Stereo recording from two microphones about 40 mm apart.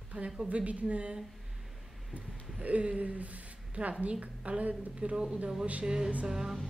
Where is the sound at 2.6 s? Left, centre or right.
Right.